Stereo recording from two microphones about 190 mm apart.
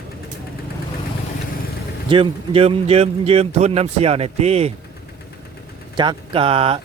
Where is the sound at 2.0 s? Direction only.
25° right (ahead or behind).